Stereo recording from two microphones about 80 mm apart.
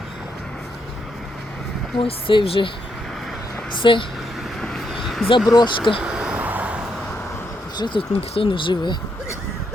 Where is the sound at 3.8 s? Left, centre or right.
Left.